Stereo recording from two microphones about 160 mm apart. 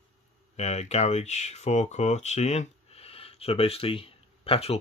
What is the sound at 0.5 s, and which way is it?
Speech, 45° left (ahead or behind).